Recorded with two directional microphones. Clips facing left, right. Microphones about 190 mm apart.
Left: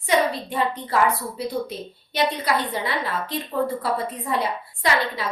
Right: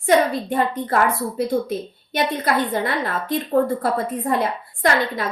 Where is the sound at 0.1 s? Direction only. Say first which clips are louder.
Right 4 dB; 50° right (ahead or behind).